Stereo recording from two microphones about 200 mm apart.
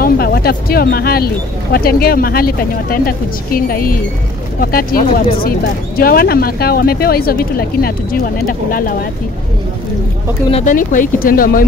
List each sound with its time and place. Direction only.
0.0 s speech: 50° left (ahead or behind)
10.5 s speech: 40° left (ahead or behind)